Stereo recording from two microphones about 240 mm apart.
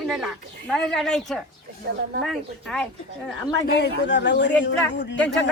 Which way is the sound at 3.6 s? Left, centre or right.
Left.